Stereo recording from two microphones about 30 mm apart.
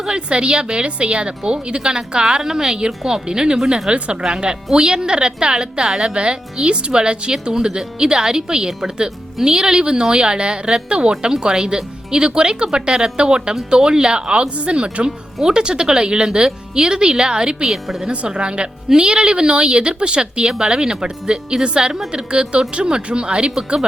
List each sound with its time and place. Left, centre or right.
0.1 s a woman's voice: right
3.8 s a woman's voice: right
4.2 s a woman's voice: right